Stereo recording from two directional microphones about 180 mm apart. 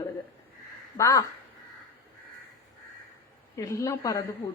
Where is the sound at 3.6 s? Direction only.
15° left (ahead or behind).